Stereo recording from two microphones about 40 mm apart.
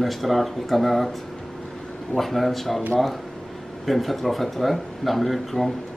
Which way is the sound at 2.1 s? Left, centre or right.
Centre.